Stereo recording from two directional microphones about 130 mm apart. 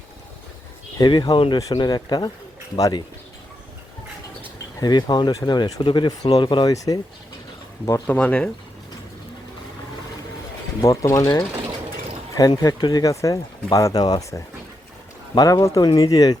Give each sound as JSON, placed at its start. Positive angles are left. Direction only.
{"t": 0.9, "sound": "speech", "side_deg": 35}
{"t": 4.8, "sound": "speech", "side_deg": 35}
{"t": 8.0, "sound": "speech", "side_deg": 10}
{"t": 10.8, "sound": "speech", "side_deg": 25}